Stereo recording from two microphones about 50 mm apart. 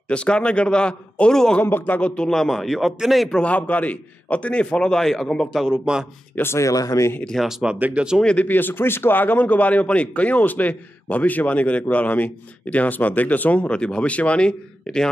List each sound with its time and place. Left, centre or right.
0.1 s a man's voice: left
1.3 s a man's voice: centre
1.6 s a man's voice: left
2.0 s a man's voice: left
2.2 s speech: centre
3.4 s a man's voice: left; by 5.8 s centre
6.4 s speech: left
7.3 s speech: centre
8.0 s speech: right
8.4 s a man's voice: left; by 15.0 s centre